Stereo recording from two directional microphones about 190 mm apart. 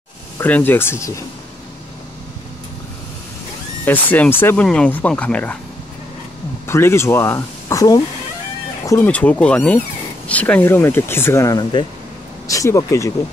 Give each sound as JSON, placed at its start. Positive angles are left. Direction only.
{"t": 0.4, "sound": "speech", "side_deg": 10}
{"t": 3.8, "sound": "speech", "side_deg": 10}
{"t": 6.7, "sound": "speech", "side_deg": 15}